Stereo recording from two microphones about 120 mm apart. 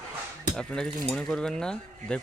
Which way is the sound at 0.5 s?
5° left (ahead or behind).